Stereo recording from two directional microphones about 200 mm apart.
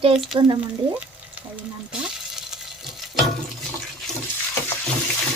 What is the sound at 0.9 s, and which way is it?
Frying, 5° right (ahead or behind).